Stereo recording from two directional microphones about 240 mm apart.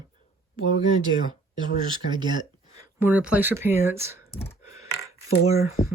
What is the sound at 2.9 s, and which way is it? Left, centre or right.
Speech, centre.